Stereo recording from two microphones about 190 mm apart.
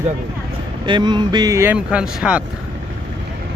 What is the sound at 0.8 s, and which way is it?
Speech, 25° right (ahead or behind).